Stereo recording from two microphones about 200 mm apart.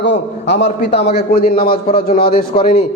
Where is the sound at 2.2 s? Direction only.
25° left (ahead or behind).